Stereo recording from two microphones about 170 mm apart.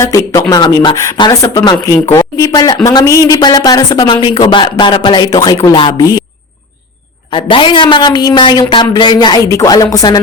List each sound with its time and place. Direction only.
0.0 s speech: 20° left (ahead or behind)
7.3 s speech: 30° left (ahead or behind)